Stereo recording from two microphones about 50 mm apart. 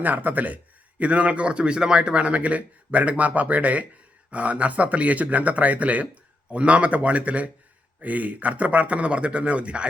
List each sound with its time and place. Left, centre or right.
0.0 s speech: right